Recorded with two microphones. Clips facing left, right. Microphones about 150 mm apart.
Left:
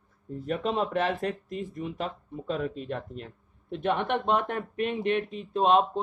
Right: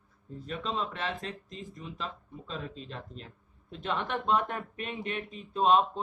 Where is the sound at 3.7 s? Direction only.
65° left (ahead or behind).